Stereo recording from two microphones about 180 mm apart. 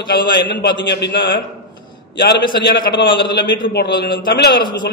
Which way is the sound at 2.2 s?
70° left (ahead or behind).